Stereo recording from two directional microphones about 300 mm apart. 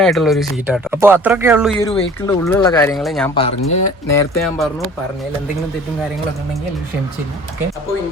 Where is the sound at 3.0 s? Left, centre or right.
Centre.